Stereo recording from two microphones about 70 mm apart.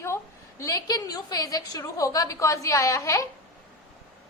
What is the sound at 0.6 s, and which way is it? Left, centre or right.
A woman's voice, left.